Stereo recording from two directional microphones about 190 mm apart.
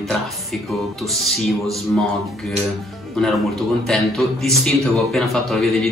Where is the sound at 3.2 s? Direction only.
Centre (ahead or behind).